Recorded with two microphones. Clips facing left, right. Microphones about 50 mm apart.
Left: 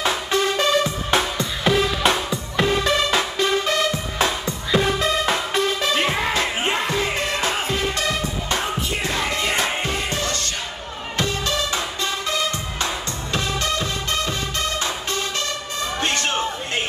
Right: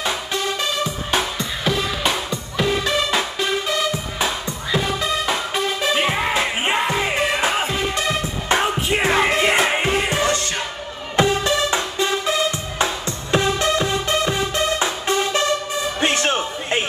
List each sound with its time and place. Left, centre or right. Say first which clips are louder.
0.8 s music: left 1 dB; centre
8.5 s music: right 8 dB; right
9.3 s music: right 5 dB; right
16.0 s a sound: right 3 dB; centre